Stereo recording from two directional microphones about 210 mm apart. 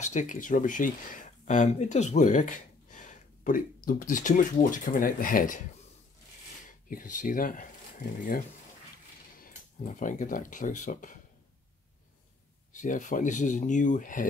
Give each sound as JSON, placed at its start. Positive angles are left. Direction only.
{"t": 0.0, "sound": "speech", "side_deg": 35}
{"t": 6.9, "sound": "speech", "side_deg": 40}
{"t": 9.4, "sound": "speech", "side_deg": 40}
{"t": 12.7, "sound": "speech", "side_deg": 35}